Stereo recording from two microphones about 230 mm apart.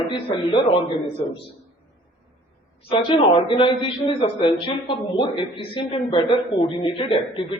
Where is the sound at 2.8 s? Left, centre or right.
Left.